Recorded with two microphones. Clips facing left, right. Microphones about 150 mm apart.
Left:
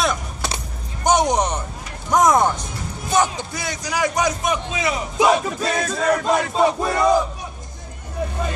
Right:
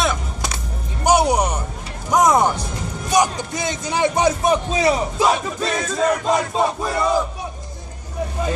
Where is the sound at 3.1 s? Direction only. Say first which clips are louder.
Right 2 dB; 15° right (ahead or behind); by 5.0 s 35° right (ahead or behind).